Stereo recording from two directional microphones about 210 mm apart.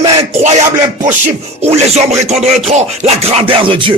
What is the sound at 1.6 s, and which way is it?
Speech, 30° right (ahead or behind).